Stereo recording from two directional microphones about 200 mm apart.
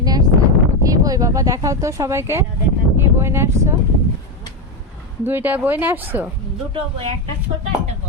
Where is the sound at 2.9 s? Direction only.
10° right (ahead or behind).